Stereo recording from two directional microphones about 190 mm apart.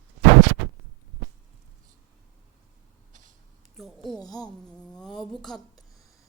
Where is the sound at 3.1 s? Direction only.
45° right (ahead or behind).